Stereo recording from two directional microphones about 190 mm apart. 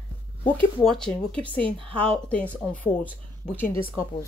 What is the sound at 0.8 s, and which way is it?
Speech, 5° left (ahead or behind).